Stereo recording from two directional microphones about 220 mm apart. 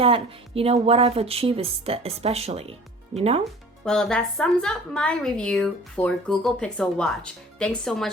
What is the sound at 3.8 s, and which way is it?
Speech, centre (ahead or behind).